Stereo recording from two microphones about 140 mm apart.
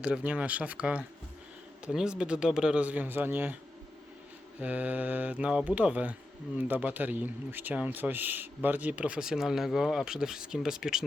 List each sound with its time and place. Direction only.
0.0 s speech: 10° right (ahead or behind)
4.6 s speech: 10° right (ahead or behind)